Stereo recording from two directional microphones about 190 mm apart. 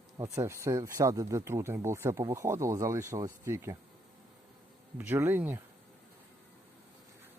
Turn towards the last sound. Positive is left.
turn(degrees=-10)  # may be behind; listen again after turning